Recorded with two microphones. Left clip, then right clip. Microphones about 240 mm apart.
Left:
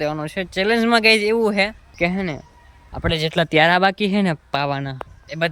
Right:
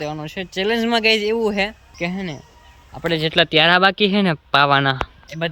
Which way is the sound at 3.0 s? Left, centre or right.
Left.